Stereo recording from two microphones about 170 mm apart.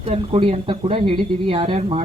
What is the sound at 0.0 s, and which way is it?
Speech, 35° right (ahead or behind).